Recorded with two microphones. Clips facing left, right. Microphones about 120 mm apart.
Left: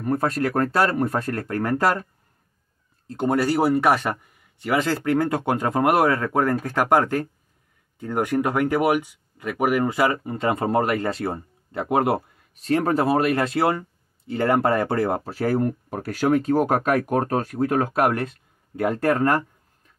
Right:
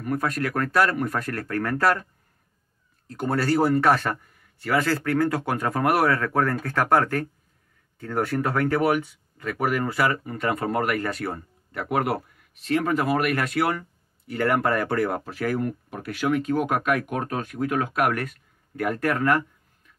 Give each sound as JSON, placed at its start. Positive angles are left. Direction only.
{"t": 0.0, "sound": "speech", "side_deg": 30}
{"t": 3.1, "sound": "speech", "side_deg": 20}